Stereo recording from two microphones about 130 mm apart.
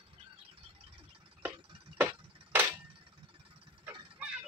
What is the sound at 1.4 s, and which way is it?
Tick-tock, 15° right (ahead or behind).